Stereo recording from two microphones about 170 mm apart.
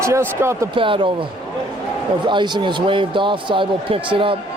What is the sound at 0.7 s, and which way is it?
Speech, 30° right (ahead or behind).